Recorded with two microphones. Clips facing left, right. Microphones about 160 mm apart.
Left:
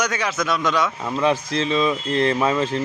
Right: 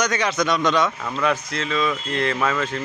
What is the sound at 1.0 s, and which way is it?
Speech, 25° left (ahead or behind).